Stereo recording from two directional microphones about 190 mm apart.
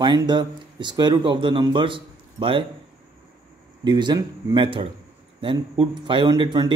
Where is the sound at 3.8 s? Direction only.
25° right (ahead or behind).